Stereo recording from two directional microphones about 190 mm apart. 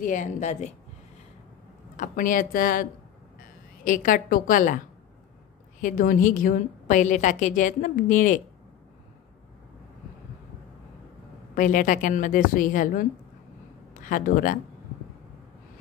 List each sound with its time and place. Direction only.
0.0 s speech: 40° left (ahead or behind)
2.0 s a woman's voice: 45° left (ahead or behind)
5.8 s a woman's voice: 45° left (ahead or behind)
11.5 s a woman's voice: 45° left (ahead or behind)